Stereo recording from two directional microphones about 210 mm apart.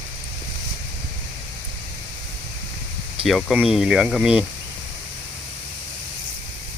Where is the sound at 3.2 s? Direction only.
Centre (ahead or behind).